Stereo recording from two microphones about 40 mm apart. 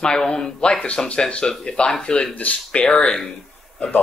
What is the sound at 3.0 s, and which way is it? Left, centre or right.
Speech, left.